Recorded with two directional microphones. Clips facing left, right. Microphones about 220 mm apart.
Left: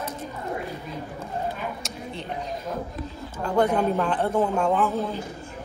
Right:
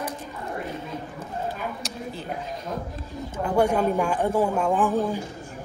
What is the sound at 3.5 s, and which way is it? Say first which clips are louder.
A man's voice: even; 10° right (ahead or behind).